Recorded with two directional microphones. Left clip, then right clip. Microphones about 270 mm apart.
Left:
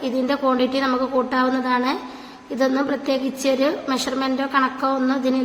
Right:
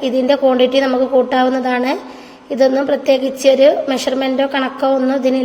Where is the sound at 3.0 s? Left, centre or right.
Centre.